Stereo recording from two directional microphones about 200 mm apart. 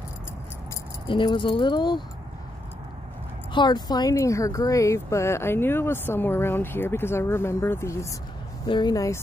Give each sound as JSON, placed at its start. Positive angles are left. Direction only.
{"t": 1.0, "sound": "speech", "side_deg": 25}
{"t": 3.5, "sound": "speech", "side_deg": 20}